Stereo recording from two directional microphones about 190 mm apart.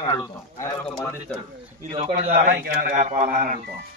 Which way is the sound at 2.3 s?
50° right (ahead or behind).